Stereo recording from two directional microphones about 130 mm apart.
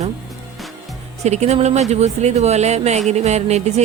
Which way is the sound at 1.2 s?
60° right (ahead or behind).